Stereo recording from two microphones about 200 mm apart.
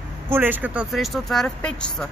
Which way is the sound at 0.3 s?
10° right (ahead or behind).